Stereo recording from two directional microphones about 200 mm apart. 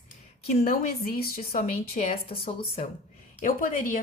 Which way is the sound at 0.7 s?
50° left (ahead or behind).